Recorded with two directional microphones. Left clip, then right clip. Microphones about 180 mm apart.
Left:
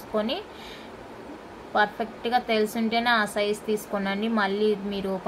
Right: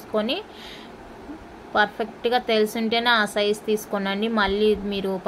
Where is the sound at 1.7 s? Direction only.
40° right (ahead or behind).